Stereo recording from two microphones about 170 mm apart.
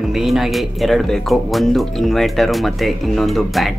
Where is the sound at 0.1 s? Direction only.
Centre (ahead or behind).